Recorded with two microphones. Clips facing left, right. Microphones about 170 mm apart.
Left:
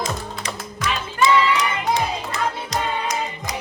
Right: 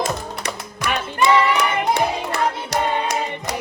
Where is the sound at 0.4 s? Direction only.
65° right (ahead or behind).